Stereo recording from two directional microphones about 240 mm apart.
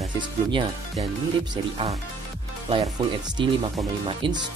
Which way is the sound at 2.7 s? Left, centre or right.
Centre.